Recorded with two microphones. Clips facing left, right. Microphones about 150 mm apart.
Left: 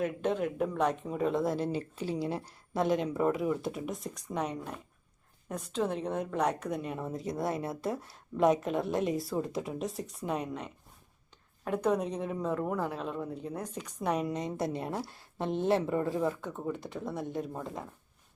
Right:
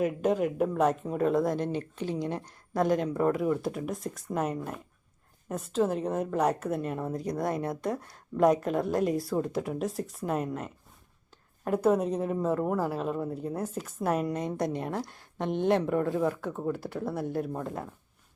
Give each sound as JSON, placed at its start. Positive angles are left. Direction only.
{"t": 0.0, "sound": "a woman's voice", "side_deg": -5}
{"t": 1.7, "sound": "speech", "side_deg": 30}
{"t": 2.0, "sound": "a woman's voice", "side_deg": 5}